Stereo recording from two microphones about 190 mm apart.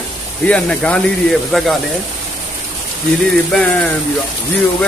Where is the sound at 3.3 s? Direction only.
5° left (ahead or behind).